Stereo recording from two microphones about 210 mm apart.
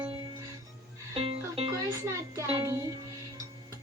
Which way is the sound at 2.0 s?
15° right (ahead or behind).